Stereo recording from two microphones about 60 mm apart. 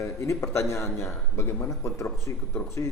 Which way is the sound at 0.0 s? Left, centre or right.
Left.